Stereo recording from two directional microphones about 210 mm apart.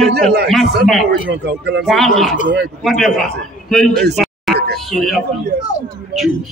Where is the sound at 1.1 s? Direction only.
50° right (ahead or behind).